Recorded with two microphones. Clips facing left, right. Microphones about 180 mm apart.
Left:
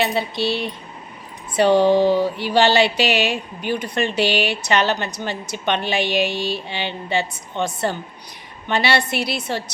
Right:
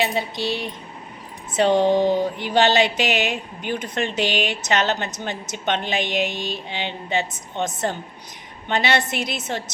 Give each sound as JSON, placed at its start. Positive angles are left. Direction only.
{"t": 0.0, "sound": "speech", "side_deg": -15}
{"t": 1.7, "sound": "a woman's voice", "side_deg": -20}